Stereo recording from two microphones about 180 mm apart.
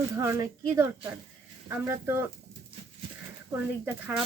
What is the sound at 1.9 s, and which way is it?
Speech, 15° right (ahead or behind).